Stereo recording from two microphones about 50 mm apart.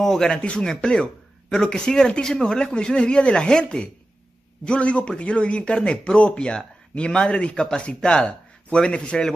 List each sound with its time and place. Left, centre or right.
0.0 s a man's voice: centre
0.3 s a man's voice: centre